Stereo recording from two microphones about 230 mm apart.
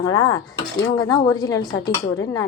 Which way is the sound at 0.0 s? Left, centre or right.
Centre.